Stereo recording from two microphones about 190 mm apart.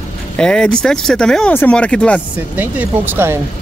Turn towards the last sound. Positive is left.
turn(degrees=-10)  # may be behind; listen again after turning